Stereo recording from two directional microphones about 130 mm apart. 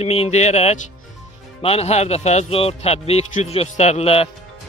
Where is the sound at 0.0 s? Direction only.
50° left (ahead or behind).